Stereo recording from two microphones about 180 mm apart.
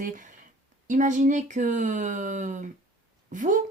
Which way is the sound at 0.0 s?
45° right (ahead or behind).